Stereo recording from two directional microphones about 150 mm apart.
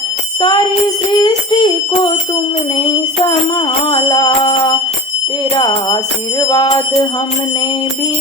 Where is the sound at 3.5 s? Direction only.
30° left (ahead or behind).